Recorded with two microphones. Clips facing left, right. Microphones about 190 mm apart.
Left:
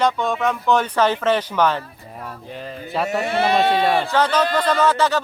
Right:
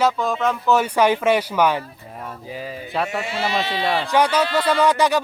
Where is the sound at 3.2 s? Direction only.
60° left (ahead or behind).